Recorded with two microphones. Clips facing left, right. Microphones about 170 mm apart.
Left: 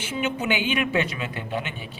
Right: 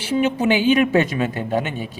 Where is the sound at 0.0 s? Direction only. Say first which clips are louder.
Right 8 dB; 35° right (ahead or behind).